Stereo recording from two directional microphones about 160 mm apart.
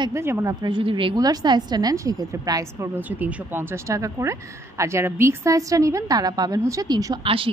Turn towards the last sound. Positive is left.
turn(degrees=-35)  # may be behind; listen again after turning